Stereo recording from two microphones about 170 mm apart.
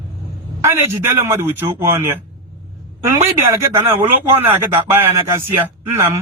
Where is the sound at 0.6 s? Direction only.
15° right (ahead or behind).